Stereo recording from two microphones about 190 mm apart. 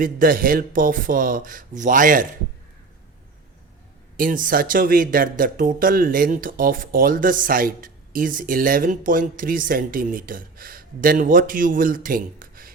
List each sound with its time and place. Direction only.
0.0 s speech: 50° right (ahead or behind)
4.2 s speech: 45° right (ahead or behind)